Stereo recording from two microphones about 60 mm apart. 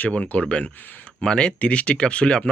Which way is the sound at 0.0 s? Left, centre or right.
Left.